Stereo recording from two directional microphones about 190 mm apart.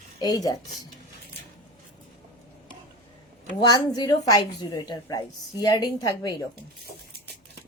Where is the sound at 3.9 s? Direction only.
20° left (ahead or behind).